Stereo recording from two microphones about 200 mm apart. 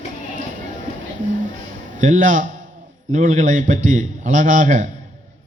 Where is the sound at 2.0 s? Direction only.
40° right (ahead or behind).